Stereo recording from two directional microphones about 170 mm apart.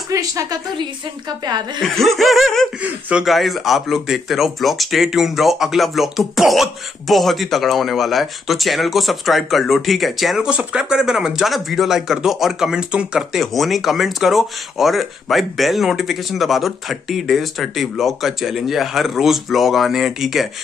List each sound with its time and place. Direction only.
0.1 s a woman's voice: 20° right (ahead or behind)
1.8 s speech: centre (ahead or behind)